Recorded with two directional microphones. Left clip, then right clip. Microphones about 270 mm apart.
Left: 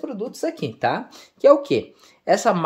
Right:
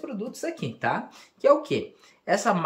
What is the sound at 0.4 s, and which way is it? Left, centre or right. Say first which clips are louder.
Speech: left 7 dB; left.